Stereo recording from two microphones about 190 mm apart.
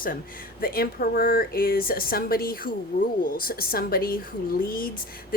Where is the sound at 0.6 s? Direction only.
50° left (ahead or behind).